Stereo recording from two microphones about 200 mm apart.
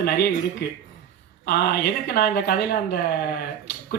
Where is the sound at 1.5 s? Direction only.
50° left (ahead or behind).